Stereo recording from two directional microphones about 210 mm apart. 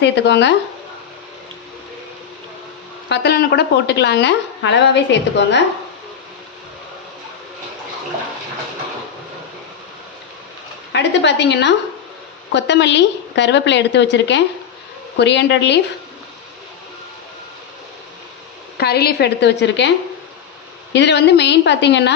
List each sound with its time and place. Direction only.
0.0 s a woman's voice: 55° left (ahead or behind)
3.1 s a woman's voice: 50° left (ahead or behind)
10.9 s a woman's voice: 55° left (ahead or behind)
18.8 s a woman's voice: 50° left (ahead or behind)
20.9 s a woman's voice: 55° left (ahead or behind)